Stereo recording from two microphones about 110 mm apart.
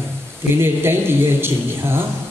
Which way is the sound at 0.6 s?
20° right (ahead or behind).